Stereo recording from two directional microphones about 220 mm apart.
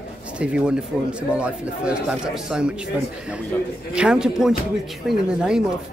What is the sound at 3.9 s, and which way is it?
Speech, 5° right (ahead or behind).